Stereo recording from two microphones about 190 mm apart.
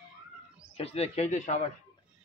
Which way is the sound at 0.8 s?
30° left (ahead or behind).